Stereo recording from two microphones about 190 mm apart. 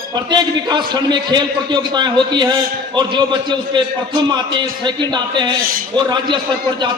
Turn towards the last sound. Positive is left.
turn(degrees=-25)  # may be behind; listen again after turning